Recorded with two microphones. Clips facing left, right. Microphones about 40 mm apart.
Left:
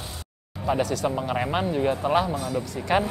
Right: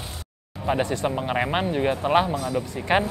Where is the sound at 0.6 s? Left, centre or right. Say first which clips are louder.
Even; right.